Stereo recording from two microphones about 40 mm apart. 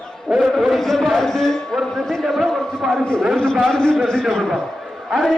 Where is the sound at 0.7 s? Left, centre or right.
Centre.